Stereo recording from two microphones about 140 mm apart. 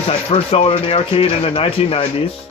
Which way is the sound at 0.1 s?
45° left (ahead or behind).